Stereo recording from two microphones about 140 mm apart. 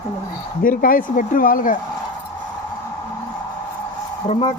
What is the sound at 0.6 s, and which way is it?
Speech, 90° left.